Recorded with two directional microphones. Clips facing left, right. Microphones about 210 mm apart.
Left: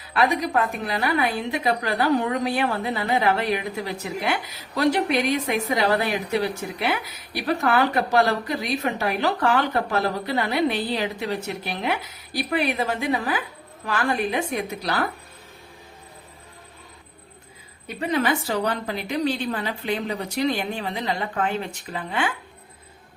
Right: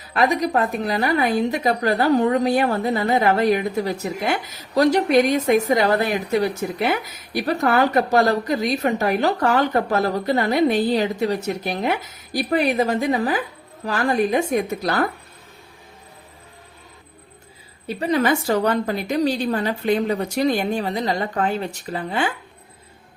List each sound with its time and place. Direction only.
0.1 s a woman's voice: 45° right (ahead or behind)
17.8 s a woman's voice: 40° right (ahead or behind)